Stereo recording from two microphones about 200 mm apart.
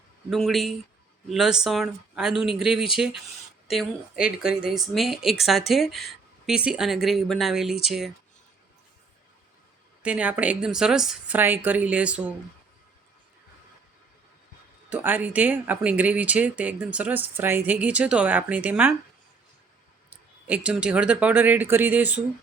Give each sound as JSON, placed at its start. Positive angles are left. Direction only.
{"t": 0.3, "sound": "a woman's voice", "side_deg": 0}
{"t": 10.0, "sound": "speech", "side_deg": -5}
{"t": 14.8, "sound": "speech", "side_deg": -10}
{"t": 20.1, "sound": "speech", "side_deg": -5}